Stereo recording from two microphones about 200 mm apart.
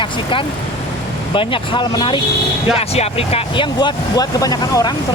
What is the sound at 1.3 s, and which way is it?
Speech, 25° left (ahead or behind).